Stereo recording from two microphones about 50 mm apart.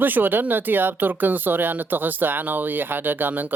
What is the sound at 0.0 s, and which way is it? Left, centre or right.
Speech, right.